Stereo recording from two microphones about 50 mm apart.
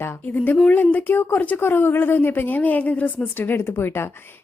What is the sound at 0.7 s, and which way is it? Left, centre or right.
A woman's voice, left.